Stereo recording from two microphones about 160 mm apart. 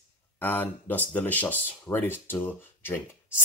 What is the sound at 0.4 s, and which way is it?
Speech, 10° left (ahead or behind).